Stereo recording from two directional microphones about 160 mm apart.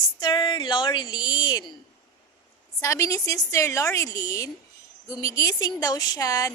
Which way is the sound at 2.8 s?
20° left (ahead or behind).